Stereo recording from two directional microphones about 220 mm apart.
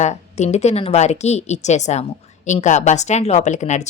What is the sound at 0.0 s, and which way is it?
Speech, 30° left (ahead or behind).